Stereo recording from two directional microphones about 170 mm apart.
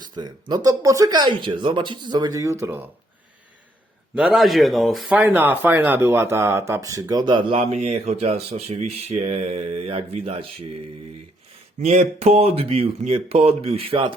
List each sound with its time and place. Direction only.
0.0 s speech: 25° right (ahead or behind)
4.1 s speech: 5° right (ahead or behind); by 10.7 s 35° right (ahead or behind)
11.8 s speech: 40° right (ahead or behind)